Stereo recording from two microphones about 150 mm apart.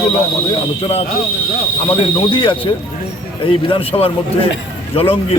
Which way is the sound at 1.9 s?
35° left (ahead or behind).